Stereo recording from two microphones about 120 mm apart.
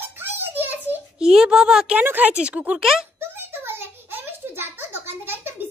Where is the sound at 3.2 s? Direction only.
20° right (ahead or behind).